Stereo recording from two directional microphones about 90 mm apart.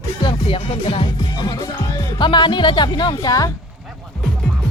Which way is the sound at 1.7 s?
45° left (ahead or behind).